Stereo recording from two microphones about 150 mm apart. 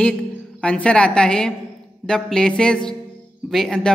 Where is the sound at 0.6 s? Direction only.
5° left (ahead or behind).